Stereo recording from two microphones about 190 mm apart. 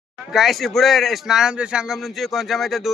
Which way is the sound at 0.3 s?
Centre (ahead or behind).